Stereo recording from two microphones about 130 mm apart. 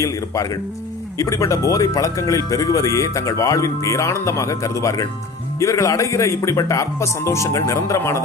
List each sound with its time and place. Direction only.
0.0 s speech: 25° left (ahead or behind)